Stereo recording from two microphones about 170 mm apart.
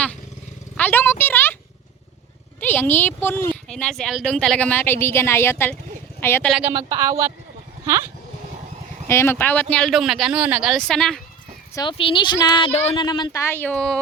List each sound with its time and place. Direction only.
0.8 s speech: 10° left (ahead or behind)
2.6 s a woman's voice: 10° left (ahead or behind)
6.5 s a woman's voice: 10° right (ahead or behind)
9.0 s speech: 15° left (ahead or behind)
11.7 s speech: 25° left (ahead or behind)
13.4 s a woman's voice: 10° left (ahead or behind)